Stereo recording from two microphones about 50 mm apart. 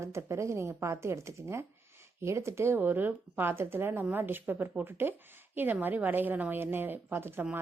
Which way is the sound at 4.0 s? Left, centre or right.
Right.